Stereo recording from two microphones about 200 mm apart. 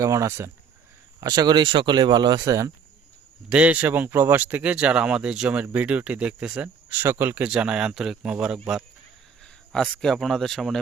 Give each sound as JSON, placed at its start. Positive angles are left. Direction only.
{"t": 0.0, "sound": "speech", "side_deg": -15}